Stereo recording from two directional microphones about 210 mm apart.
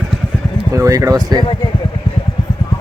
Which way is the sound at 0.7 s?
15° right (ahead or behind).